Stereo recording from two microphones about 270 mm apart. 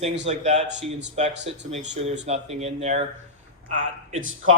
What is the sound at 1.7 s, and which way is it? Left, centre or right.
Speech, right.